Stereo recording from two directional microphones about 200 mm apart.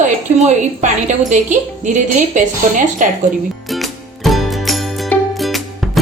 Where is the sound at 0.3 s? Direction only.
35° right (ahead or behind).